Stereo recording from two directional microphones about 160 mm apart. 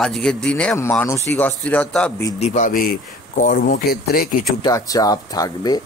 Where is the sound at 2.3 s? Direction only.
45° left (ahead or behind); by 4.3 s 75° left (ahead or behind).